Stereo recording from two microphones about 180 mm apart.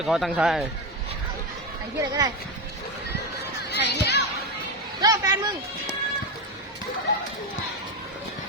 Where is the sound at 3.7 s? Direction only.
70° left (ahead or behind).